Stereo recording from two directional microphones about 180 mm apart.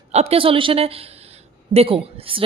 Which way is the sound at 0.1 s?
35° right (ahead or behind).